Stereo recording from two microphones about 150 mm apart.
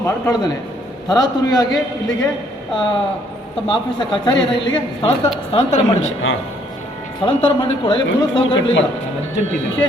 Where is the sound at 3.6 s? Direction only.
35° left (ahead or behind).